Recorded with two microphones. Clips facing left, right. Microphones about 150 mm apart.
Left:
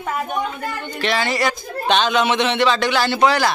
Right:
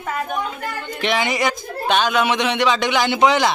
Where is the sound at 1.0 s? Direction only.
15° right (ahead or behind).